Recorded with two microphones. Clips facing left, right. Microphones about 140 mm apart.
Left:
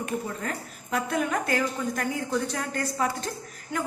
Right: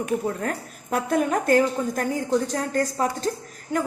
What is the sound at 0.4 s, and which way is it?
A woman's voice, 45° right (ahead or behind).